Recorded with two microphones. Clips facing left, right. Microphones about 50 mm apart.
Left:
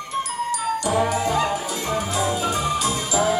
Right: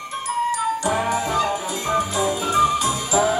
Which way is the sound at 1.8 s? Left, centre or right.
Right.